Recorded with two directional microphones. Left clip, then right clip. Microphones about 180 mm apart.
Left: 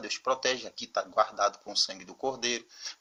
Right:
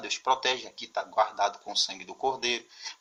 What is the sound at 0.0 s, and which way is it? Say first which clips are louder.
Speech: right 3 dB; 25° left (ahead or behind).